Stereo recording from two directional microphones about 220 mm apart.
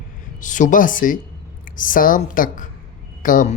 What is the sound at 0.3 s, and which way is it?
A woman's voice, 35° left (ahead or behind).